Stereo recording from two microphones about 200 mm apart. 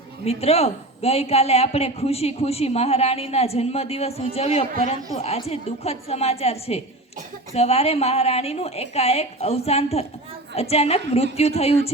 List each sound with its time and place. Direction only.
0.3 s a man's voice: 30° left (ahead or behind)